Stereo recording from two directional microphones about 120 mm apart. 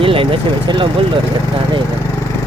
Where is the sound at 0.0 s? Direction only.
50° right (ahead or behind).